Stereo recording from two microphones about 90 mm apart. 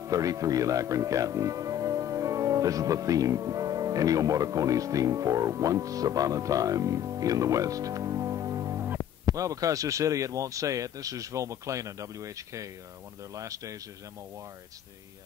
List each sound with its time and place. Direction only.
0.0 s speech: 40° right (ahead or behind)